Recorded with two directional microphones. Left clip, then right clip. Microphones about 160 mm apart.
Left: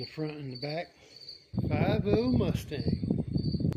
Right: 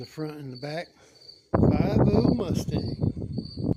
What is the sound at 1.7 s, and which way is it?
Speech, 10° right (ahead or behind).